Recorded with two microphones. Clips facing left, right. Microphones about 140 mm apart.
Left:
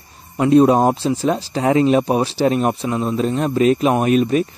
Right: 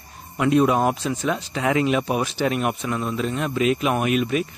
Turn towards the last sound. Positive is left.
turn(degrees=35)  # may be behind; listen again after turning